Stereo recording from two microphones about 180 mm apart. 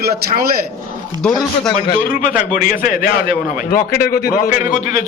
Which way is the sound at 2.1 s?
50° left (ahead or behind).